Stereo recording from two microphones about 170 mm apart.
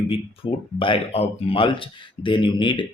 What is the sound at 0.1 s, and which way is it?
Speech, 30° left (ahead or behind).